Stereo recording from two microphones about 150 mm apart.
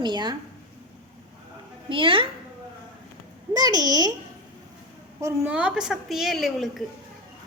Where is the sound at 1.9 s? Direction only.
35° right (ahead or behind).